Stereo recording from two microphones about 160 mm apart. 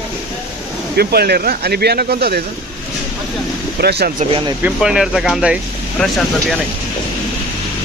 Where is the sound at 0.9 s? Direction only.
80° right.